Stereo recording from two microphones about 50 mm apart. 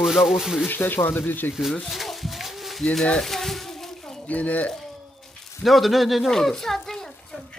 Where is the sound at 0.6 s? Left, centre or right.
Left.